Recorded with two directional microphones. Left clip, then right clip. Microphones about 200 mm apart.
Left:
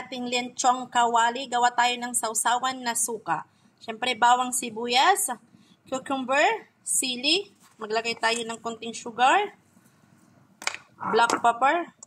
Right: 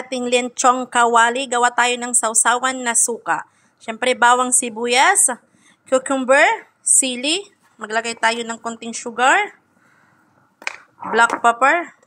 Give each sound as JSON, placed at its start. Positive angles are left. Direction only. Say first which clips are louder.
{"t": 0.1, "sound": "a woman's voice", "louder": "right 11 dB", "side_deg": -25}
{"t": 11.4, "sound": "a woman's voice", "louder": "right 7 dB", "side_deg": -20}